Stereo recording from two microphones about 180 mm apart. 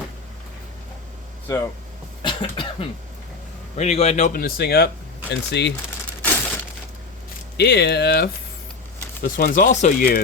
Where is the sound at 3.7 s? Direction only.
35° left (ahead or behind); by 5.7 s 70° left (ahead or behind).